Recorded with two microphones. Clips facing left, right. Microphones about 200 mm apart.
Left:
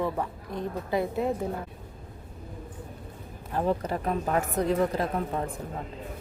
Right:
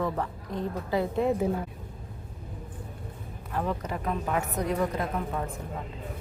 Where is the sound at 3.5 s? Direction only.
30° left (ahead or behind).